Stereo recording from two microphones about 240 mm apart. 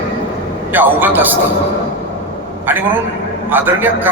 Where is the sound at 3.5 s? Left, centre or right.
Centre.